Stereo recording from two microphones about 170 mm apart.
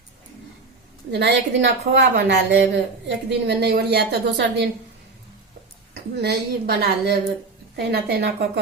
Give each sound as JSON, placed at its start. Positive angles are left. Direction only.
{"t": 1.1, "sound": "a woman's voice", "side_deg": -90}
{"t": 5.9, "sound": "a woman's voice", "side_deg": -75}